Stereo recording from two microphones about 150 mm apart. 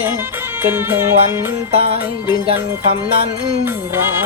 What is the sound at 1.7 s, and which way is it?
Music, 40° right (ahead or behind).